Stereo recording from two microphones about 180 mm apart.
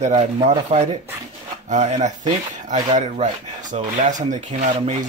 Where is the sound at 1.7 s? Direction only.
40° right (ahead or behind).